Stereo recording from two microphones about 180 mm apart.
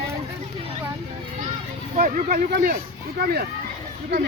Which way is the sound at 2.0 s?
45° right (ahead or behind).